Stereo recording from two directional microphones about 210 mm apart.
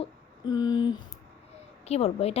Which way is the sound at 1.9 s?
30° left (ahead or behind).